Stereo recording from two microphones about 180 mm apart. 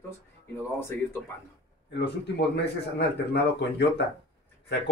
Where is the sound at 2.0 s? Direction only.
70° left (ahead or behind).